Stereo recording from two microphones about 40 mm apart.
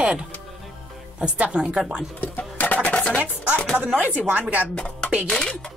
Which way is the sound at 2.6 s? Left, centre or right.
Left.